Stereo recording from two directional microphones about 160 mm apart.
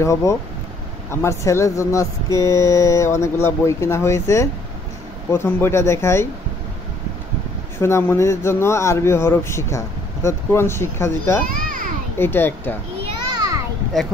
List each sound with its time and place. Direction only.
0.0 s speech: 20° left (ahead or behind)
7.8 s speech: 15° left (ahead or behind)
13.0 s children playing: 25° right (ahead or behind)
13.9 s speech: 5° left (ahead or behind)